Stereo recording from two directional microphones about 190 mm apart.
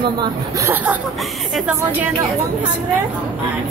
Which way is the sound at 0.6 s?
10° right (ahead or behind).